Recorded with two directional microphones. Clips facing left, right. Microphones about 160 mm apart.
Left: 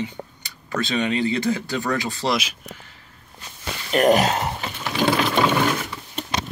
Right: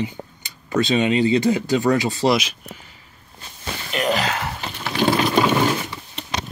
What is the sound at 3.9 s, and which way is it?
Speech, 45° left (ahead or behind).